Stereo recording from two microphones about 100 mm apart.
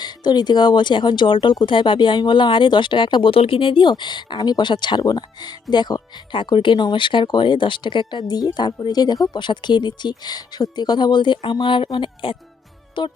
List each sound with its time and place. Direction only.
0.0 s speech: 45° left (ahead or behind)